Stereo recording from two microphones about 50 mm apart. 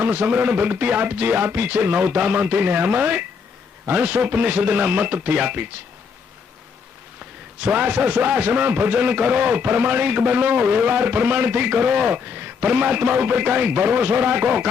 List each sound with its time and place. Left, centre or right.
0.0 s a man's voice: right
7.6 s a man's voice: right
8.9 s a man's voice: right